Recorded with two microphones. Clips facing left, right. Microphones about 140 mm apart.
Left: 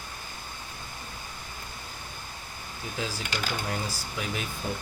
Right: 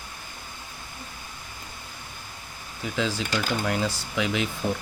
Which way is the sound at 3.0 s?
90° right.